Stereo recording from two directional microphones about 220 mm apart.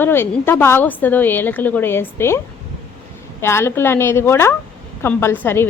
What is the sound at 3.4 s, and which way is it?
A woman's voice, 10° left (ahead or behind).